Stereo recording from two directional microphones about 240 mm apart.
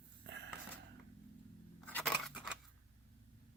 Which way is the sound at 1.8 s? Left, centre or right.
Centre.